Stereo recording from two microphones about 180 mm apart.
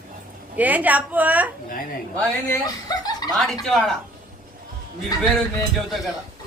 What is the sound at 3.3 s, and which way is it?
Speech, centre (ahead or behind).